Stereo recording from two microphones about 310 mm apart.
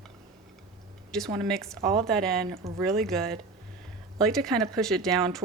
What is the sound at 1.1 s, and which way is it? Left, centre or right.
Speech, centre.